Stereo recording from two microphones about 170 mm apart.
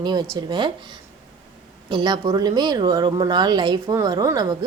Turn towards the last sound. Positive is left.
turn(degrees=-20)  # may be behind; listen again after turning